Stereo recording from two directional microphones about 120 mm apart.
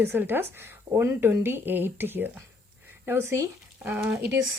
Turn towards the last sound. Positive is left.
turn(degrees=-20)  # may be behind; listen again after turning